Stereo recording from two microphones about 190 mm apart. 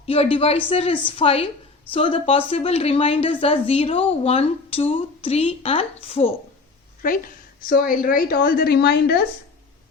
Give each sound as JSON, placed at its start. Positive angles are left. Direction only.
{"t": 0.0, "sound": "speech", "side_deg": 30}
{"t": 7.6, "sound": "a woman's voice", "side_deg": 50}